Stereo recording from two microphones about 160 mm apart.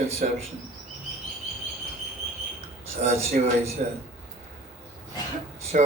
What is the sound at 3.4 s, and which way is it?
Speech, 50° right (ahead or behind).